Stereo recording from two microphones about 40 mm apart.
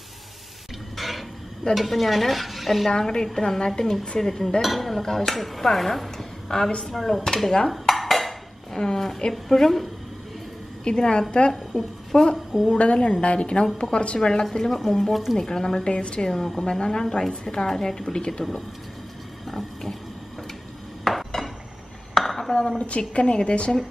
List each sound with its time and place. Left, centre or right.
0.9 s stir: centre
2.9 s speech: centre
7.7 s dishes: centre
8.7 s a woman's voice: centre
10.8 s a woman's voice: left
12.1 s speech: centre
12.7 s a woman's voice: left
14.4 s speech: centre
15.3 s a woman's voice: centre
16.2 s speech: centre
16.6 s a woman's voice: left
19.5 s pig: centre
21.0 s dishes: centre
22.8 s a woman's voice: left